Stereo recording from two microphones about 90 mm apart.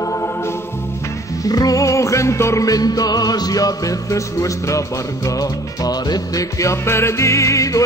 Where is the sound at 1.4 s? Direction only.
45° left (ahead or behind).